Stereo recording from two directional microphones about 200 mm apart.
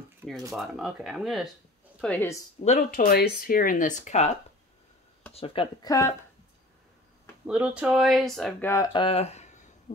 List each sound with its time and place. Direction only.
0.6 s speech: centre (ahead or behind)
2.6 s speech: 35° left (ahead or behind)
5.3 s speech: 25° left (ahead or behind)
7.4 s speech: 5° right (ahead or behind); by 9.9 s 35° left (ahead or behind)